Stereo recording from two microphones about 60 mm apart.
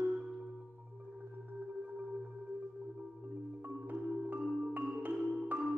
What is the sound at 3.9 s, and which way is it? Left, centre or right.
Music, right.